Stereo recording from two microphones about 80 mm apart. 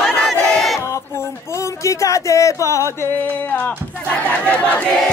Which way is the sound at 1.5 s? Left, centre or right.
Left.